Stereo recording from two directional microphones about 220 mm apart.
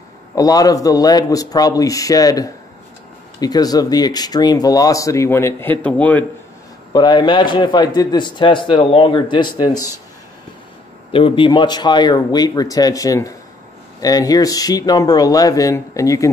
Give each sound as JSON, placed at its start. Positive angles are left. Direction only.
{"t": 0.4, "sound": "speech", "side_deg": 15}
{"t": 6.9, "sound": "a man's voice", "side_deg": 20}
{"t": 11.1, "sound": "a man's voice", "side_deg": 25}